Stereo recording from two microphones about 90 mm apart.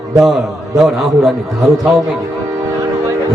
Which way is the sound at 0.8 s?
Centre (ahead or behind).